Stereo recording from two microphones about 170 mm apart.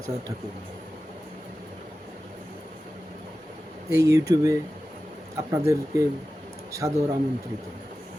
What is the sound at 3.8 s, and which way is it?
Speech, 20° right (ahead or behind).